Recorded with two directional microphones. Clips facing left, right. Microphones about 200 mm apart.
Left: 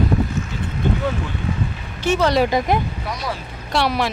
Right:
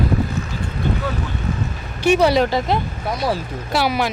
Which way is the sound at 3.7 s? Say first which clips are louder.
Even; centre (ahead or behind).